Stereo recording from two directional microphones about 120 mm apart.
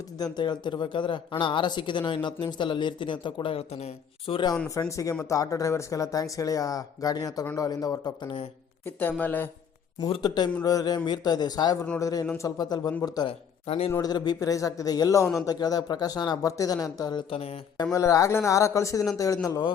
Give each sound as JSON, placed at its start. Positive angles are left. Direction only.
{"t": 0.2, "sound": "speech", "side_deg": 40}
{"t": 4.7, "sound": "a man's voice", "side_deg": 25}
{"t": 8.8, "sound": "speech", "side_deg": 15}
{"t": 10.2, "sound": "a man's voice", "side_deg": 35}
{"t": 13.2, "sound": "speech", "side_deg": 55}
{"t": 14.0, "sound": "a man's voice", "side_deg": 35}
{"t": 17.9, "sound": "a man's voice", "side_deg": 25}